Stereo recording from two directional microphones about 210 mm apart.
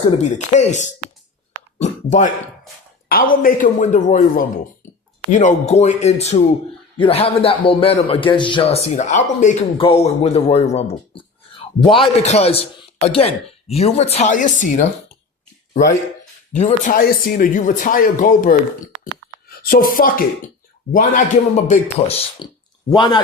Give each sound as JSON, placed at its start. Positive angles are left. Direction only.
{"t": 0.2, "sound": "a man's voice", "side_deg": 35}
{"t": 11.9, "sound": "a man's voice", "side_deg": 30}
{"t": 16.5, "sound": "speech", "side_deg": 35}
{"t": 19.5, "sound": "a man's voice", "side_deg": 45}